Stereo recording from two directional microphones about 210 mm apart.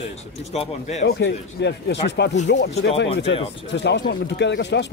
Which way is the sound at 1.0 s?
55° left (ahead or behind).